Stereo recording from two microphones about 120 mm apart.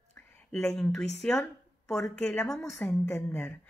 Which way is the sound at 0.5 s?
Centre (ahead or behind).